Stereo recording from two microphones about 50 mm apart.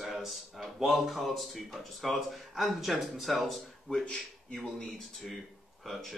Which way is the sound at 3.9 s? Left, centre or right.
Centre.